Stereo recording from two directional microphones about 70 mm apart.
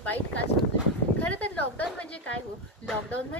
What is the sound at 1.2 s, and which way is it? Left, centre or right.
A woman's voice, left.